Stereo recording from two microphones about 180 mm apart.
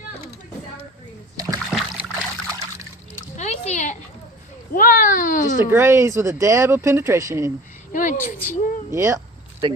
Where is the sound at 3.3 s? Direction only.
40° left (ahead or behind).